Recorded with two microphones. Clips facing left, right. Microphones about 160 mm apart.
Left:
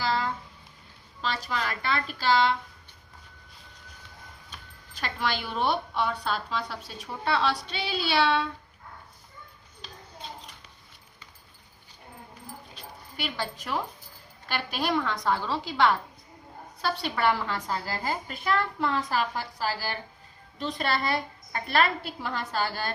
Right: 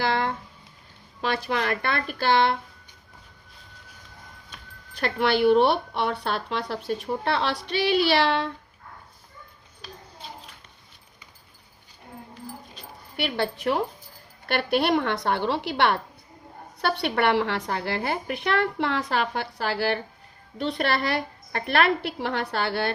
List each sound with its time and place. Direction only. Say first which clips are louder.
0.0 s a sound: right 3 dB; 55° right (ahead or behind)
1.2 s a woman's voice: right 5 dB; 60° right (ahead or behind)
4.9 s a woman's voice: right 8 dB; 60° right (ahead or behind)
13.4 s a woman's voice: right 7 dB; 65° right (ahead or behind)